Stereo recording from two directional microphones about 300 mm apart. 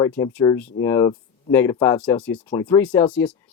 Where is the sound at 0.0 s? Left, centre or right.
Centre.